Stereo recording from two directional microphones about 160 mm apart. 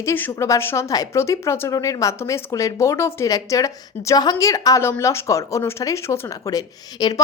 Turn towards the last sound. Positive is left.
turn(degrees=25)  # may be behind; listen again after turning